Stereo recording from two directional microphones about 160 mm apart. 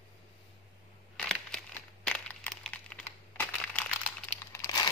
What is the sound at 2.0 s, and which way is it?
Crumpling, 5° left (ahead or behind).